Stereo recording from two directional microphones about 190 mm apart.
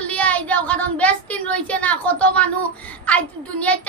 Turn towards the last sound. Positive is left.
turn(degrees=5)  # may be behind; listen again after turning